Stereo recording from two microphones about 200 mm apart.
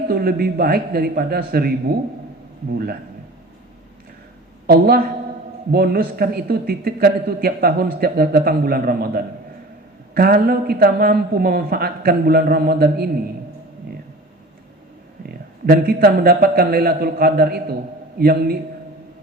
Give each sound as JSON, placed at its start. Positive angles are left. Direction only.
{"t": 0.1, "sound": "a man's voice", "side_deg": -45}
{"t": 4.6, "sound": "a woman's voice", "side_deg": -50}
{"t": 15.3, "sound": "a man's voice", "side_deg": -50}